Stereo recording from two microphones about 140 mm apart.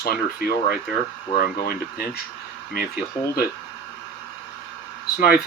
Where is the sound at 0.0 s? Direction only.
90° left.